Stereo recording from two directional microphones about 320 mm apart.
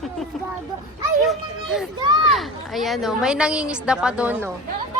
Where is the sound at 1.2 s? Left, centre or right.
Centre.